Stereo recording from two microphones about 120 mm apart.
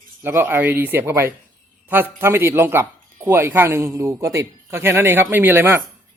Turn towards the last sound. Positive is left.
turn(degrees=-20)  # may be behind; listen again after turning